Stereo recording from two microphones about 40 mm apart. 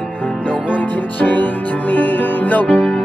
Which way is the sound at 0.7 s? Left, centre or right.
Left.